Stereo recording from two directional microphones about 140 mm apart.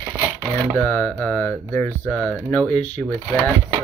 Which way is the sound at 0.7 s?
15° left (ahead or behind).